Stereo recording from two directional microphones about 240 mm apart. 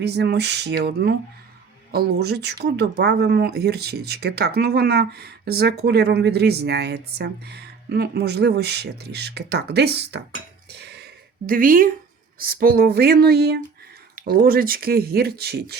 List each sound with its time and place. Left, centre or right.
0.0 s speech: right
10.7 s a sound: right
12.4 s speech: right